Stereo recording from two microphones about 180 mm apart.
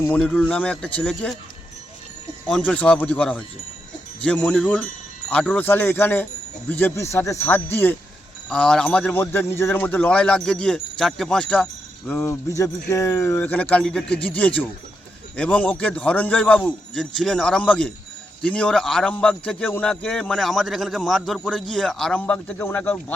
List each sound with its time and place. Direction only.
0.0 s a man's voice: 5° left (ahead or behind)
2.5 s a man's voice: 10° left (ahead or behind)